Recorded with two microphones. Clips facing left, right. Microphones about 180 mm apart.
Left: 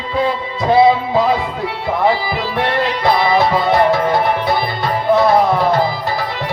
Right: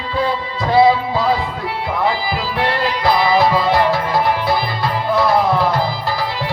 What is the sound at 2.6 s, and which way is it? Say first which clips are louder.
Music: left 2 dB; 25° left (ahead or behind).